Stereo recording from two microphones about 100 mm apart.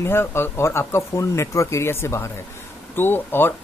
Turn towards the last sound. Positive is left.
turn(degrees=20)  # may be behind; listen again after turning